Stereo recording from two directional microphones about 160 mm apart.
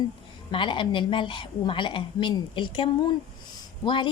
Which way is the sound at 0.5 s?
30° left (ahead or behind).